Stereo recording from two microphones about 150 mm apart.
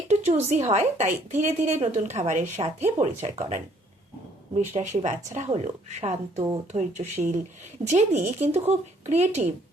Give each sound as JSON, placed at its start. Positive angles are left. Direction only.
{"t": 0.1, "sound": "a sound", "side_deg": -50}
{"t": 0.7, "sound": "speech", "side_deg": -55}
{"t": 2.6, "sound": "speech", "side_deg": -35}
{"t": 3.0, "sound": "speech", "side_deg": -50}